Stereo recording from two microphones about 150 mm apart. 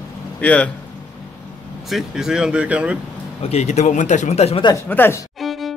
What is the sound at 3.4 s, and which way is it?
Speech, 45° left (ahead or behind).